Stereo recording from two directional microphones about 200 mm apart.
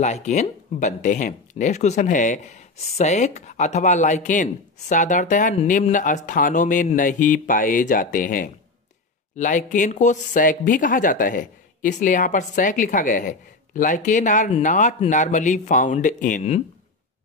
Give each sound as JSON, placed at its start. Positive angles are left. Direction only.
{"t": 0.0, "sound": "speech", "side_deg": 35}